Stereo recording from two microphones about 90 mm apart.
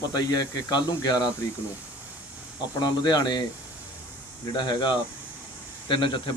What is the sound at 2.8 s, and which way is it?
Speech, 50° left (ahead or behind).